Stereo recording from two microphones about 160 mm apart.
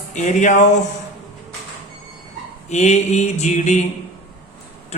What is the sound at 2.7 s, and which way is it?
Mantra, 45° left (ahead or behind).